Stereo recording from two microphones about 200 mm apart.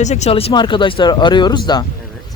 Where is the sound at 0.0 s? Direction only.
35° left (ahead or behind).